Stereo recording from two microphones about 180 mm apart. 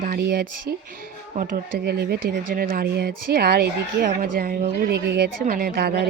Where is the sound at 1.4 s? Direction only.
50° right (ahead or behind).